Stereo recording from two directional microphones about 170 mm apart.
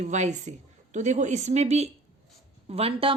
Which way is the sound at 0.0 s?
45° right (ahead or behind).